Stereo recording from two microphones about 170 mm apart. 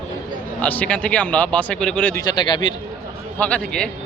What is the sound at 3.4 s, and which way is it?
Speech, 5° left (ahead or behind).